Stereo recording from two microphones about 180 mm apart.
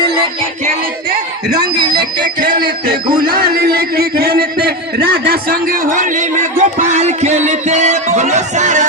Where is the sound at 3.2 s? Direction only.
55° right (ahead or behind).